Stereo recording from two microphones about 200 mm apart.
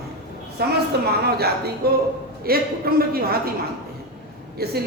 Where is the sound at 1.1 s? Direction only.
50° right (ahead or behind).